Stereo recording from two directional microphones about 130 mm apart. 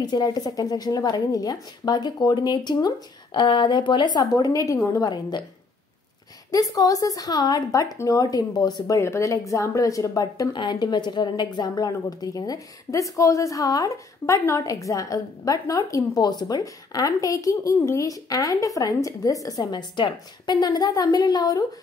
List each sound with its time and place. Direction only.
0.0 s a woman's voice: 30° left (ahead or behind)
6.5 s a woman's voice: 25° left (ahead or behind)